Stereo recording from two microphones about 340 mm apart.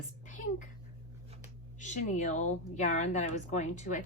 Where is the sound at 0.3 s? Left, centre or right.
Left.